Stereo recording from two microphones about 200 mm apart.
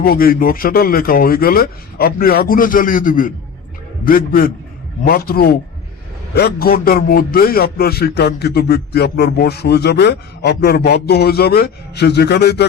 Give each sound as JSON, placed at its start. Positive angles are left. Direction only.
{"t": 0.0, "sound": "a man's voice", "side_deg": 45}